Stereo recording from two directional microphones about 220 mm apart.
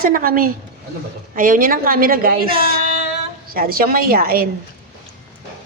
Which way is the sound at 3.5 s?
40° right (ahead or behind).